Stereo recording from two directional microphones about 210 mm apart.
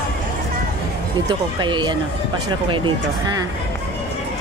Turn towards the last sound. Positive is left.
turn(degrees=-20)  # may be behind; listen again after turning